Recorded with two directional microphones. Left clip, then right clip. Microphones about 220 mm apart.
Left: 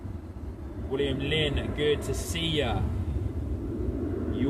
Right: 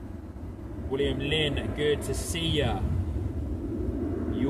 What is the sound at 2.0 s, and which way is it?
Speech, 35° right (ahead or behind).